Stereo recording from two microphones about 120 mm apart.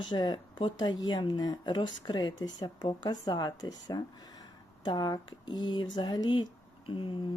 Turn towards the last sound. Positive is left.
turn(degrees=45)  # may be behind; listen again after turning